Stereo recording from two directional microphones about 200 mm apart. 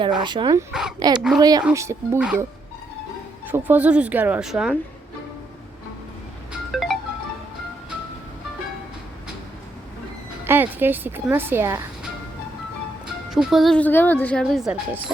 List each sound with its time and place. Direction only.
0.2 s speech: 25° right (ahead or behind)
0.7 s a woman's voice: 5° right (ahead or behind)
0.9 s speech: 20° right (ahead or behind)
3.5 s speech: 10° right (ahead or behind)
6.7 s music: centre (ahead or behind)
10.4 s speech: 10° right (ahead or behind)
13.3 s a woman's voice: centre (ahead or behind)